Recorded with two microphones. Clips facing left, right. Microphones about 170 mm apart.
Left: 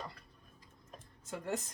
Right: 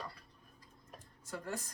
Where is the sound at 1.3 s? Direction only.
20° left (ahead or behind).